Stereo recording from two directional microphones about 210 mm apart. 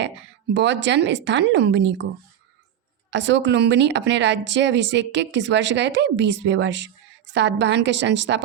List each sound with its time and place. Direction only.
0.5 s speech: 60° right (ahead or behind)
3.1 s speech: 60° right (ahead or behind)